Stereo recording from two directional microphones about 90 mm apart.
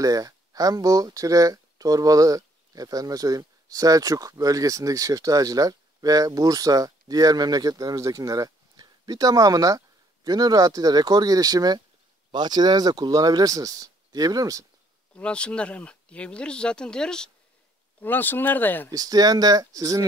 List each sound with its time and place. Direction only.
0.0 s speech: 40° right (ahead or behind)
15.1 s speech: 10° left (ahead or behind)
18.0 s speech: 20° left (ahead or behind)
18.9 s speech: 45° right (ahead or behind)